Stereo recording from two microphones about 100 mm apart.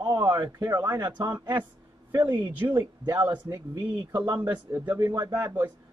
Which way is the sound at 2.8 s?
40° right (ahead or behind).